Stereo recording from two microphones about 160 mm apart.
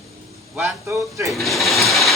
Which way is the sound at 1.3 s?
Centre (ahead or behind).